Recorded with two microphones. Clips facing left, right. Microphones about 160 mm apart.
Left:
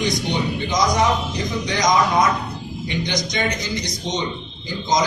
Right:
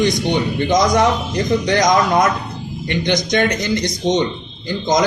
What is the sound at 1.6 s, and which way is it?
Speech, 55° right (ahead or behind).